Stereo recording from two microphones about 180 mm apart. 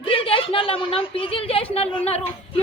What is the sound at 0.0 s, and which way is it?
A woman's voice, 30° left (ahead or behind).